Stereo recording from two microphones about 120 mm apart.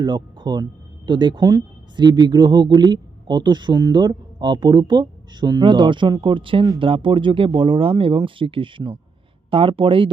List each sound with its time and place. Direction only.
0.0 s speech: 40° right (ahead or behind)